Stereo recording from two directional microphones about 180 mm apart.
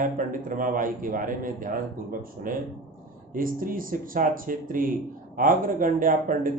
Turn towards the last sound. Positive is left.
turn(degrees=-50)  # may be behind; listen again after turning